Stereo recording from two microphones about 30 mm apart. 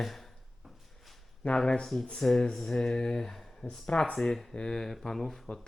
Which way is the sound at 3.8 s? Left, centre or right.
Left.